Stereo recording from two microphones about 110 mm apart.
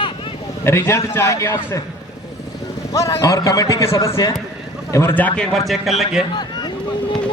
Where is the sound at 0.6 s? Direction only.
25° left (ahead or behind).